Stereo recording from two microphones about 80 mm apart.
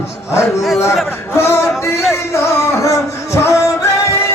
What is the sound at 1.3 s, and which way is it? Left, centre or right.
Music, left.